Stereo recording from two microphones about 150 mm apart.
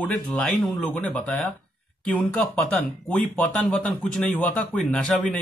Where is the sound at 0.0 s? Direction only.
5° left (ahead or behind).